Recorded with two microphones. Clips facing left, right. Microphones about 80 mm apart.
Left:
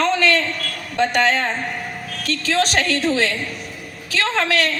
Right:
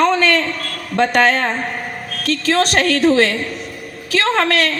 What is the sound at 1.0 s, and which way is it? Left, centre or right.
A woman's voice, right.